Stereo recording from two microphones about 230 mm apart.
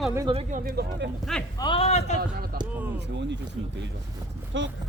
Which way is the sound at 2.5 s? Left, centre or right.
Right.